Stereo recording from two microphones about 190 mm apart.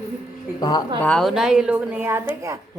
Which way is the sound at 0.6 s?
20° left (ahead or behind).